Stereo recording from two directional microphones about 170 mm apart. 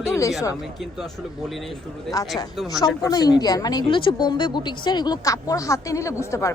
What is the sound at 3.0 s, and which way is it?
A woman's voice, 25° left (ahead or behind).